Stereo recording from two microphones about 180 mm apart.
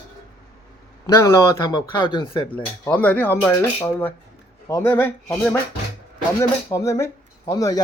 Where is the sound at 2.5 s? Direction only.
10° left (ahead or behind).